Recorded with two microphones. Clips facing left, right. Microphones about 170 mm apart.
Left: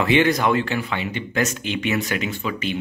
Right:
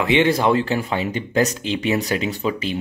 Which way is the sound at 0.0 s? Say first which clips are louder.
Right 1 dB; 20° right (ahead or behind).